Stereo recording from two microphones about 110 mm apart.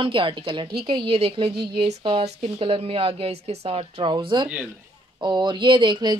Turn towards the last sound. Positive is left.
turn(degrees=-45)  # may be behind; listen again after turning